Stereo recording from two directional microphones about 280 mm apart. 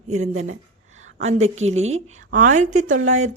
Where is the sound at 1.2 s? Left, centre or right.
Right.